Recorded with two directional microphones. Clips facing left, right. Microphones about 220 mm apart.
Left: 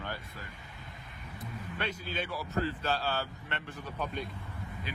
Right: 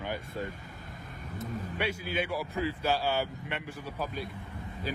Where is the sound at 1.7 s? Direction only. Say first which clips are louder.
Right 4 dB; 10° right (ahead or behind).